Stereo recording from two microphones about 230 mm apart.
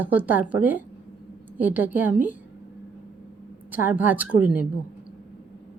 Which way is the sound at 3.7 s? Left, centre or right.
Centre.